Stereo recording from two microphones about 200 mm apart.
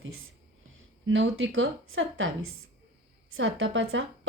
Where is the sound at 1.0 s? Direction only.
70° right (ahead or behind).